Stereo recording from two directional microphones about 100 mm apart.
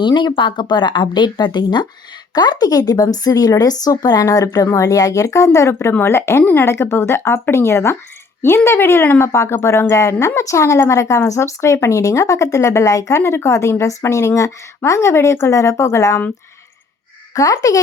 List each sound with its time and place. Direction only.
0.0 s speech: 50° left (ahead or behind); by 16.2 s 30° left (ahead or behind)
17.3 s speech: 30° left (ahead or behind)